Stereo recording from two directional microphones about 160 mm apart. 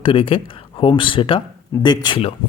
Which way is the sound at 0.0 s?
30° left (ahead or behind).